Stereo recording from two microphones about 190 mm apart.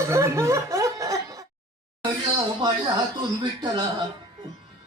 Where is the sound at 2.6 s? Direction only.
20° right (ahead or behind).